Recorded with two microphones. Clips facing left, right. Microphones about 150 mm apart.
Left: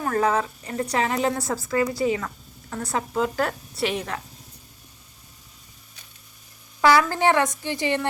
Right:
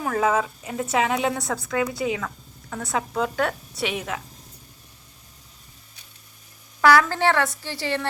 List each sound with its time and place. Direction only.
0.0 s a woman's voice: 5° right (ahead or behind)
6.8 s a woman's voice: 15° left (ahead or behind)